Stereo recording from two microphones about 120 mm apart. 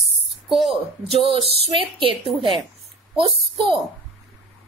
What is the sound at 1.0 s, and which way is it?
A woman's voice, 55° right (ahead or behind).